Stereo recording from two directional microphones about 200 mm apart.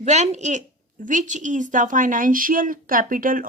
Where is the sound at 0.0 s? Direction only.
35° right (ahead or behind).